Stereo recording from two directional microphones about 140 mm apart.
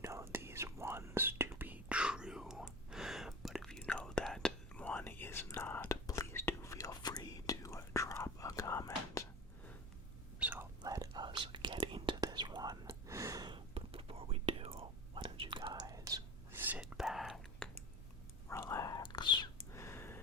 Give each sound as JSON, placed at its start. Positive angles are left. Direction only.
{"t": 0.0, "sound": "whispering", "side_deg": -20}
{"t": 10.4, "sound": "whispering", "side_deg": -15}
{"t": 13.7, "sound": "whispering", "side_deg": -45}
{"t": 16.6, "sound": "whispering", "side_deg": -10}
{"t": 18.4, "sound": "whispering", "side_deg": 20}
{"t": 19.7, "sound": "a sound", "side_deg": 20}